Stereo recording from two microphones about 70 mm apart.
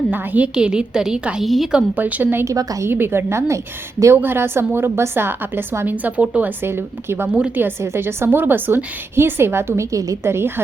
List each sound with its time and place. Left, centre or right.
0.1 s a woman's voice: right
0.5 s a woman's voice: centre
2.0 s a woman's voice: right
2.4 s a woman's voice: right
2.8 s a woman's voice: right
6.6 s a woman's voice: right
9.9 s a woman's voice: right
10.2 s a woman's voice: right